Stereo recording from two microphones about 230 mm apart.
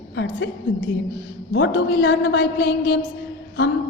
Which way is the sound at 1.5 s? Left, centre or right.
Left.